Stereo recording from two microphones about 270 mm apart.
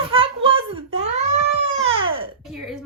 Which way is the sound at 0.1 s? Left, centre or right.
Centre.